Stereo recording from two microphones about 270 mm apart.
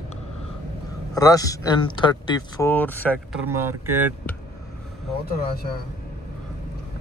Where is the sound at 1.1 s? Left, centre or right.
Centre.